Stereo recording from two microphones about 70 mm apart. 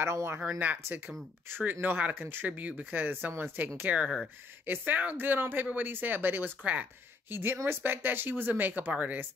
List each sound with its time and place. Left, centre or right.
0.0 s speech: right
1.6 s speech: right